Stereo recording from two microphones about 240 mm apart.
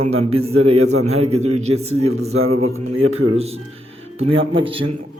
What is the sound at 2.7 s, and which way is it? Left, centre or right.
Mantra, right.